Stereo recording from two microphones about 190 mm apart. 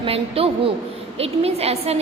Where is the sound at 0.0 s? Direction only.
30° right (ahead or behind).